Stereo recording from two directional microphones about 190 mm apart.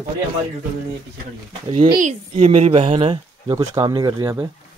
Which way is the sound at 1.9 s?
40° right (ahead or behind).